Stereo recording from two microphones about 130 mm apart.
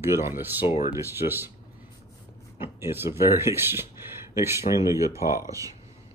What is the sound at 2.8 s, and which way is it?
Speech, 20° right (ahead or behind).